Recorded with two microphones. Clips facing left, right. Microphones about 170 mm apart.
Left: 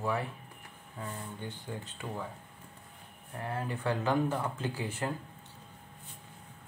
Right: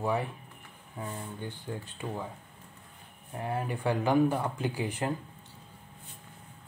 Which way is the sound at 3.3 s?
15° right (ahead or behind).